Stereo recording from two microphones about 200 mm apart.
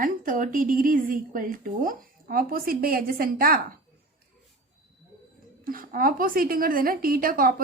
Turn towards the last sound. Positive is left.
turn(degrees=-45)  # may be behind; listen again after turning